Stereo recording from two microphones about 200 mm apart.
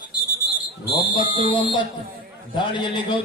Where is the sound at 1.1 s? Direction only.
25° left (ahead or behind).